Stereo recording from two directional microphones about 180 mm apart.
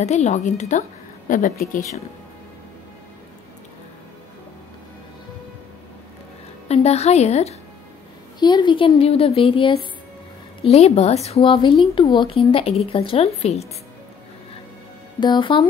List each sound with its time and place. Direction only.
0.0 s a woman's voice: 40° left (ahead or behind)
6.7 s speech: 35° left (ahead or behind)
8.4 s a woman's voice: 25° left (ahead or behind)
15.1 s a woman's voice: 25° left (ahead or behind)